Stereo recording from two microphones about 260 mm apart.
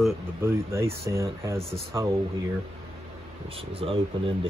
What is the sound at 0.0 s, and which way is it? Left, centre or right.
Speech, centre.